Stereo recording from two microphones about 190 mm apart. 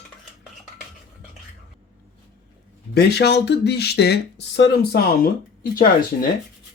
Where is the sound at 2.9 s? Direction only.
60° left (ahead or behind).